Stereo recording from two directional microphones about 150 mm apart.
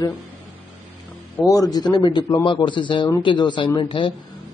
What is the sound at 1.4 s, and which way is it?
A man's voice, 25° left (ahead or behind).